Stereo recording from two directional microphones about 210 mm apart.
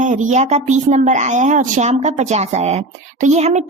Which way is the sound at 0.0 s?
35° right (ahead or behind).